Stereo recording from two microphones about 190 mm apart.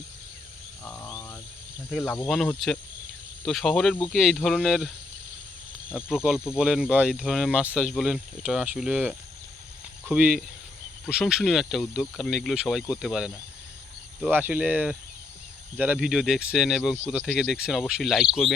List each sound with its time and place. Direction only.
0.9 s a sound: 15° left (ahead or behind)
1.9 s speech: centre (ahead or behind)
5.9 s speech: 5° right (ahead or behind)